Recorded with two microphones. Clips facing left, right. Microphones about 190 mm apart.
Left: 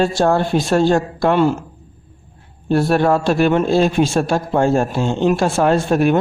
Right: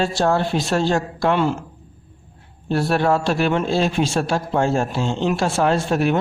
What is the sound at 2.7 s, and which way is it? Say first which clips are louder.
A man's voice: left 4 dB; 50° left (ahead or behind).